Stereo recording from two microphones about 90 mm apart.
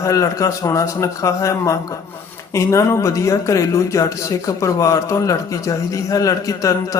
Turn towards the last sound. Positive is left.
turn(degrees=40)  # may be behind; listen again after turning